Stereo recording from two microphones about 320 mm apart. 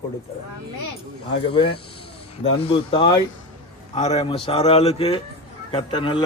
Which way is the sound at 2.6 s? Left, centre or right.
Centre.